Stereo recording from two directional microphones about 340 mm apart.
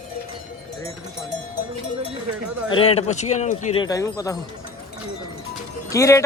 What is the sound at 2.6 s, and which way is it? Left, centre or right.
Speech, centre.